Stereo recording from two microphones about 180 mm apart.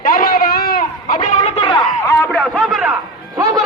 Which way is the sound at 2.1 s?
10° left (ahead or behind).